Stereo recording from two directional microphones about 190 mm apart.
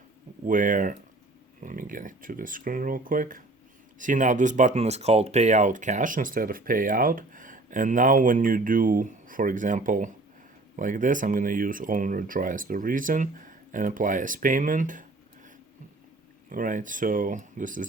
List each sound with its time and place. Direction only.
0.4 s speech: 45° right (ahead or behind)
16.5 s speech: 45° right (ahead or behind)